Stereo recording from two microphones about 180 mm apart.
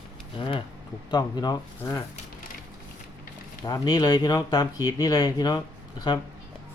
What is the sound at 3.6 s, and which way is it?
Speech, 20° left (ahead or behind).